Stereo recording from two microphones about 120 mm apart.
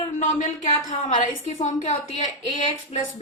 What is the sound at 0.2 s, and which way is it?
Speech, 90° left.